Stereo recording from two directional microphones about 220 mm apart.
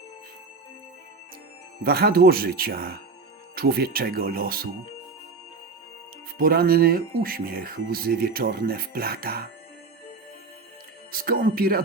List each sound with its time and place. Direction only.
1.8 s speech: 45° right (ahead or behind)
6.4 s speech: 40° right (ahead or behind)
11.1 s speech: 40° right (ahead or behind)